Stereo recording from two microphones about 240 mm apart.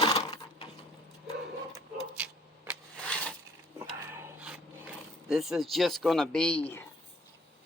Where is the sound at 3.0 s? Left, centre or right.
Centre.